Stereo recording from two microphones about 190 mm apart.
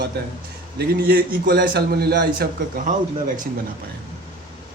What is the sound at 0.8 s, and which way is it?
A man's voice, 50° right (ahead or behind).